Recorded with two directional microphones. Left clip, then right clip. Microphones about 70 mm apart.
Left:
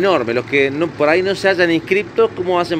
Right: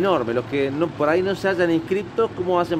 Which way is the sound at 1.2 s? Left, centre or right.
Centre.